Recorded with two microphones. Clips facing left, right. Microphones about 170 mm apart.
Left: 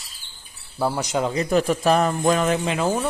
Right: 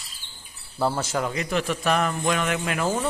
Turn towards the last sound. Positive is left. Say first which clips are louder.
# left 3 dB
turn(degrees=15)  # may be behind; listen again after turning